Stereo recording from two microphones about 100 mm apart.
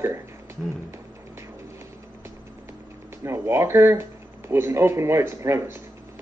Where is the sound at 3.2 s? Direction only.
25° right (ahead or behind).